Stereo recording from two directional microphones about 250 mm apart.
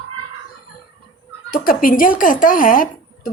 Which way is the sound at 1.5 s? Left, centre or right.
Left.